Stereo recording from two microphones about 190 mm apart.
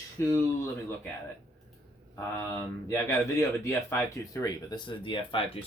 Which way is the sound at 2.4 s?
10° left (ahead or behind).